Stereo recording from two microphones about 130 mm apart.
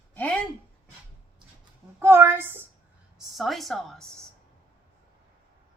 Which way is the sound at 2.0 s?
20° right (ahead or behind).